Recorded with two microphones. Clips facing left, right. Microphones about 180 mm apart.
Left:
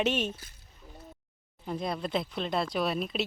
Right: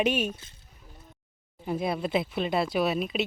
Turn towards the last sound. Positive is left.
turn(degrees=0)  # may be behind; listen again after turning